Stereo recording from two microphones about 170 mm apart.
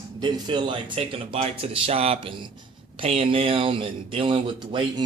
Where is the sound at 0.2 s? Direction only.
25° right (ahead or behind).